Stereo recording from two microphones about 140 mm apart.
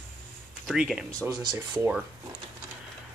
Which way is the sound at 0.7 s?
5° right (ahead or behind).